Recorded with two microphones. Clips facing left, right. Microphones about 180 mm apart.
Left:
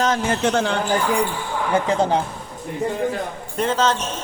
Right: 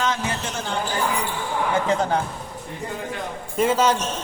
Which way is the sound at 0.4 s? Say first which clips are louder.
Left 9 dB; 70° left (ahead or behind).